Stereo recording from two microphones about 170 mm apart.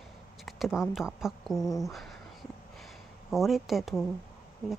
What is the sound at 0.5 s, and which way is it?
Speech, centre (ahead or behind).